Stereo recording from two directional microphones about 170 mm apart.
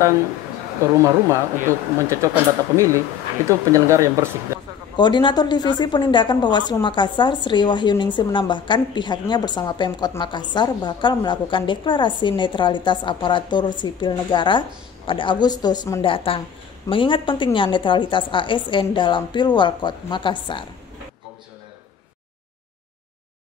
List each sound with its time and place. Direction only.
0.9 s speech: 20° right (ahead or behind)
4.9 s a woman's voice: 25° left (ahead or behind)